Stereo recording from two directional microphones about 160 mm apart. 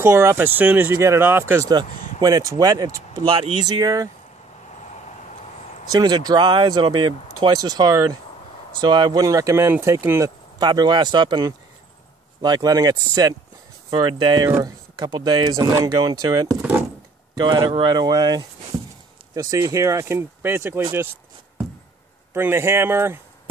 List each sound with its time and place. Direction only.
0.0 s speech: 15° right (ahead or behind)
5.9 s speech: 25° right (ahead or behind)
22.3 s speech: 15° right (ahead or behind)